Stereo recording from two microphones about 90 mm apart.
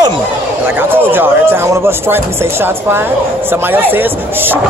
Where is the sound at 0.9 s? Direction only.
25° right (ahead or behind).